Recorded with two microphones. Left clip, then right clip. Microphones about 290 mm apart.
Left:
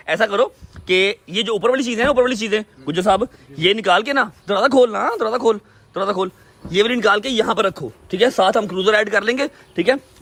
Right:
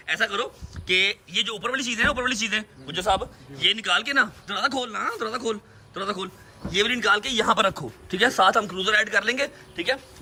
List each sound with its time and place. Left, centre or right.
0.0 s speech: centre
2.9 s a man's voice: left